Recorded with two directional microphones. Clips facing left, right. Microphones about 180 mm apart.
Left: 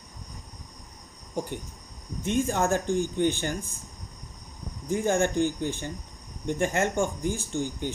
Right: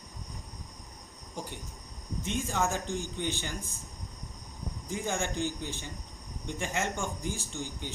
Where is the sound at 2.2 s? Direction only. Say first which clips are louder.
Left 7 dB; 55° left (ahead or behind).